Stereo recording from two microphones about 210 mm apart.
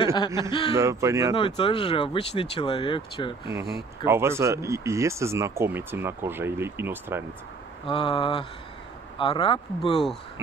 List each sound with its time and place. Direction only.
0.0 s speech: 20° left (ahead or behind)
0.7 s speech: 15° right (ahead or behind)
1.3 s speech: 25° left (ahead or behind)
4.0 s speech: 10° right (ahead or behind)
7.8 s speech: 25° left (ahead or behind)